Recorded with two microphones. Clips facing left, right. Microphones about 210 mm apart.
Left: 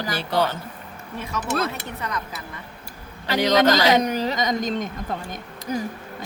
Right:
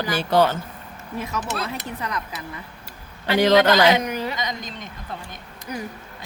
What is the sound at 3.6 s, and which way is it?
A woman's voice, 40° left (ahead or behind).